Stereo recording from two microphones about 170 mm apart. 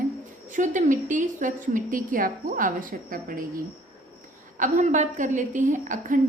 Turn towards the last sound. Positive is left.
turn(degrees=-50)  # may be behind; listen again after turning